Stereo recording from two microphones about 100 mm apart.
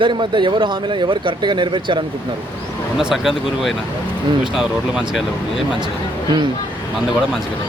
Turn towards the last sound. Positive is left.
turn(degrees=0)  # may be behind; listen again after turning